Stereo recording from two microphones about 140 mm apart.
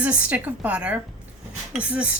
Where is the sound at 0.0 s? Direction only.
10° right (ahead or behind).